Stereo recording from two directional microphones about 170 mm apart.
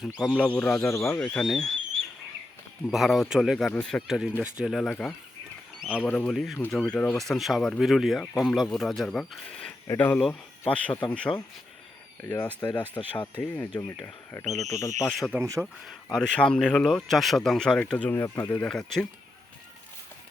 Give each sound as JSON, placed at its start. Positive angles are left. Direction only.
{"t": 0.0, "sound": "speech", "side_deg": -5}
{"t": 2.9, "sound": "speech", "side_deg": 0}
{"t": 8.2, "sound": "speech", "side_deg": 10}
{"t": 9.8, "sound": "speech", "side_deg": 15}
{"t": 15.2, "sound": "speech", "side_deg": -10}
{"t": 16.1, "sound": "speech", "side_deg": 5}
{"t": 18.7, "sound": "speech", "side_deg": 5}